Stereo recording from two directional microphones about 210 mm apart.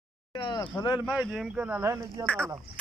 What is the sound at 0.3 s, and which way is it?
Speech, 20° left (ahead or behind).